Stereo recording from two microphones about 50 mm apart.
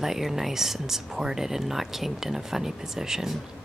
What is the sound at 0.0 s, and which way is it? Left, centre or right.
Speech, centre.